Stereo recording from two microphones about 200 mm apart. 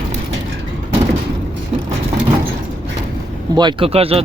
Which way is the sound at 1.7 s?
35° right (ahead or behind).